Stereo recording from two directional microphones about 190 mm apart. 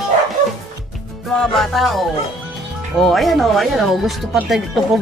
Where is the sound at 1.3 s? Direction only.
5° left (ahead or behind).